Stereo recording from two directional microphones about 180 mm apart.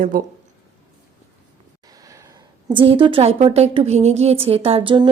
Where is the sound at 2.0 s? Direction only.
15° right (ahead or behind).